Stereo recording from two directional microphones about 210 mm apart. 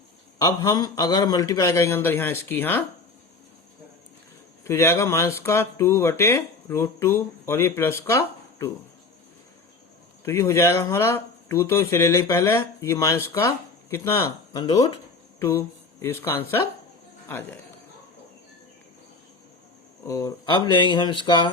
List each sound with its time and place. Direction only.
0.3 s speech: 20° left (ahead or behind)
4.6 s speech: 15° left (ahead or behind)
10.2 s speech: 15° left (ahead or behind)
20.1 s speech: 15° left (ahead or behind)